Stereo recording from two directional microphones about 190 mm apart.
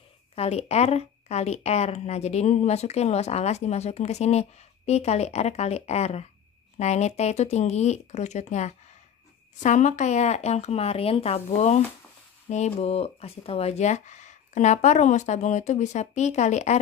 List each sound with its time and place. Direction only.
0.4 s speech: 35° left (ahead or behind)